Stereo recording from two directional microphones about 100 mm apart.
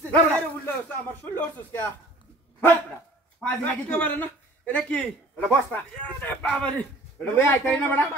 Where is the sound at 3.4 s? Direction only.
15° left (ahead or behind).